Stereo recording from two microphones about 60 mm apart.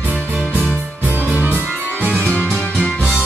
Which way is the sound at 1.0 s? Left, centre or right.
Right.